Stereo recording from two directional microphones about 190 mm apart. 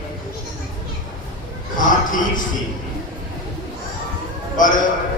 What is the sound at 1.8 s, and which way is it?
Speech, 45° left (ahead or behind).